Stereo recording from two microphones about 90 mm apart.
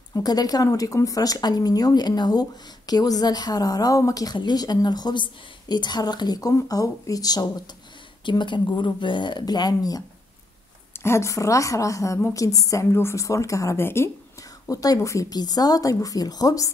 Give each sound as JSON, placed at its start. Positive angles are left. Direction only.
{"t": 0.1, "sound": "a woman's voice", "side_deg": 45}
{"t": 8.3, "sound": "speech", "side_deg": 60}
{"t": 10.9, "sound": "speech", "side_deg": 30}
{"t": 14.7, "sound": "speech", "side_deg": 40}